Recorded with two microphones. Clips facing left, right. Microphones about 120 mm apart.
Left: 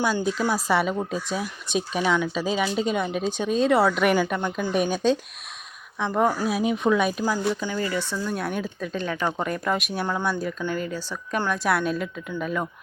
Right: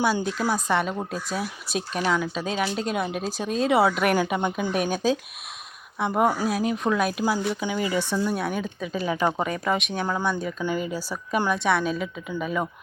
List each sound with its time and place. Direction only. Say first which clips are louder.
0.0 s speech: even; 5° right (ahead or behind)
6.5 s speech: left 2 dB; centre (ahead or behind); by 8.4 s 15° right (ahead or behind)
8.4 s speech: even; centre (ahead or behind)
9.5 s speech: even; centre (ahead or behind)
10.6 s speech: right 1 dB; 10° right (ahead or behind)